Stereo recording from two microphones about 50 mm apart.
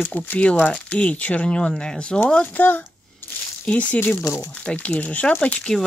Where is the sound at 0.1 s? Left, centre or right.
Left.